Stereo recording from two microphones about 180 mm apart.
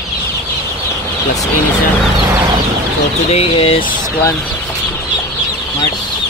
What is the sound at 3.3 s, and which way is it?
Speech, 35° left (ahead or behind).